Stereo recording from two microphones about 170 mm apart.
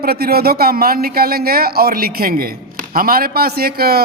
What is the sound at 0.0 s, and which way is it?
A man's voice, 65° right (ahead or behind).